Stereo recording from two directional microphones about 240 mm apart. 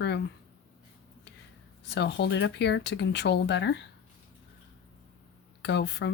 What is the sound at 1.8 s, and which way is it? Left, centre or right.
Speech, left.